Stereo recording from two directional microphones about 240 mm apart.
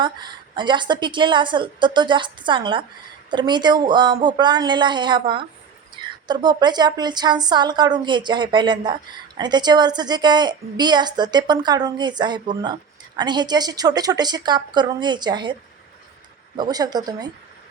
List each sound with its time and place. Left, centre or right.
0.0 s a woman's voice: centre
16.6 s a woman's voice: centre